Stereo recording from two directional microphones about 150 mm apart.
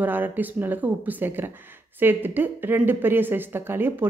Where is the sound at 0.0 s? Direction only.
10° right (ahead or behind).